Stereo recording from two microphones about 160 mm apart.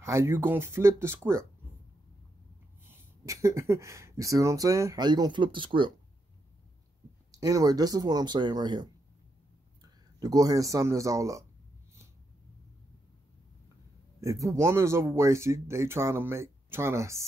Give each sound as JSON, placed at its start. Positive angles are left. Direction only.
{"t": 0.0, "sound": "speech", "side_deg": -15}
{"t": 2.9, "sound": "speech", "side_deg": -20}
{"t": 7.3, "sound": "speech", "side_deg": -20}
{"t": 10.2, "sound": "speech", "side_deg": -25}
{"t": 14.2, "sound": "speech", "side_deg": -20}